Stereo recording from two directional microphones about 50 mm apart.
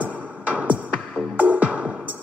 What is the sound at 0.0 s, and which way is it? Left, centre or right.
Music, right.